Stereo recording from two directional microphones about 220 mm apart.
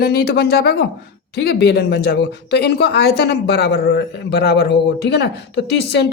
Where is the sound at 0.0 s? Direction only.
45° left (ahead or behind).